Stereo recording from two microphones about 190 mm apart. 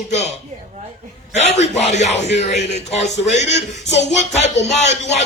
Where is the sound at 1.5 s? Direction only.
35° left (ahead or behind).